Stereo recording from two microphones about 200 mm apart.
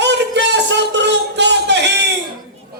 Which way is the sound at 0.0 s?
60° right (ahead or behind).